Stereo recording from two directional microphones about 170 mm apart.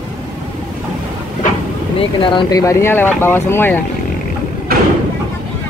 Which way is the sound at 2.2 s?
30° left (ahead or behind).